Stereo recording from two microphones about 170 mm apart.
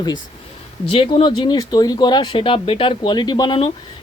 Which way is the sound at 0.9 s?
35° left (ahead or behind).